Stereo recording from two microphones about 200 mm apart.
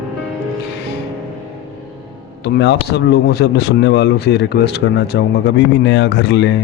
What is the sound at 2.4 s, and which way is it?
Speech, 55° left (ahead or behind).